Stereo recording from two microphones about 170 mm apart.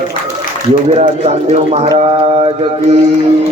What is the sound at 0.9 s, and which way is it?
Speech, 40° right (ahead or behind).